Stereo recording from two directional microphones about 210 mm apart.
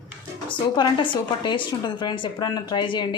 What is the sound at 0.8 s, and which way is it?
A woman's voice, 25° left (ahead or behind).